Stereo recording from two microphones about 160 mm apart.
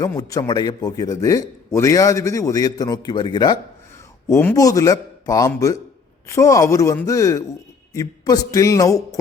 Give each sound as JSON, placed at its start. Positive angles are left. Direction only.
{"t": 0.2, "sound": "a man's voice", "side_deg": 20}
{"t": 4.3, "sound": "a man's voice", "side_deg": 15}